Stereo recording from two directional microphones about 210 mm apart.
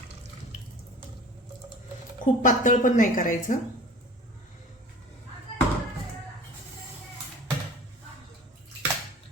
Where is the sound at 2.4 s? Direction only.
40° left (ahead or behind).